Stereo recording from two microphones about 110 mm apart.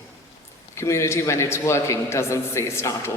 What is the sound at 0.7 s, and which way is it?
A man's voice, 25° left (ahead or behind).